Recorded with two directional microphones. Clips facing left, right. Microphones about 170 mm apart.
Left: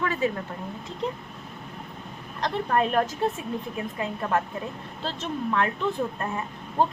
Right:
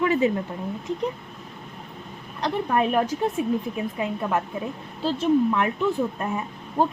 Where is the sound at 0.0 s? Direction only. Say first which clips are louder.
Right 5 dB; 20° right (ahead or behind).